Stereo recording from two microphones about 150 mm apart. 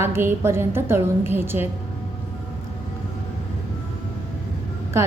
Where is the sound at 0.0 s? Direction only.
15° right (ahead or behind).